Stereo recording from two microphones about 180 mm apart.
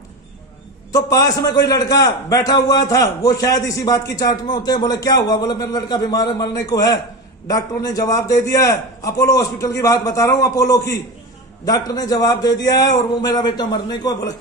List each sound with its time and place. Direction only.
0.9 s a man's voice: 20° left (ahead or behind)